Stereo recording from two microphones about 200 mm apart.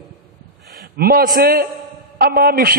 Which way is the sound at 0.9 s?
50° right (ahead or behind).